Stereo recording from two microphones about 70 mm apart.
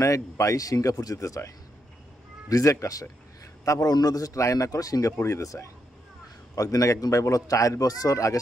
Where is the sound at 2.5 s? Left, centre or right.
Left.